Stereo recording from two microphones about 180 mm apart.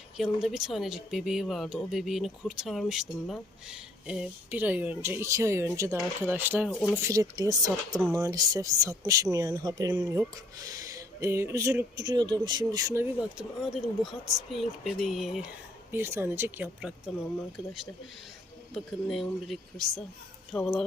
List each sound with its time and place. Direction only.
0.2 s speech: centre (ahead or behind)
13.3 s speech: centre (ahead or behind)